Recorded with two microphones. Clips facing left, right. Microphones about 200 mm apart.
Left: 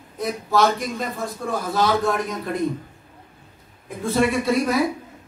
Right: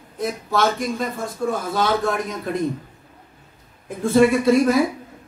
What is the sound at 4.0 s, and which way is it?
Speech, 50° right (ahead or behind).